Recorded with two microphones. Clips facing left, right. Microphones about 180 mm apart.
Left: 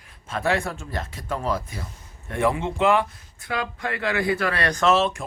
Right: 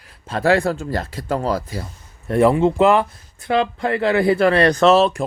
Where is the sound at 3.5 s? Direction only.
25° right (ahead or behind).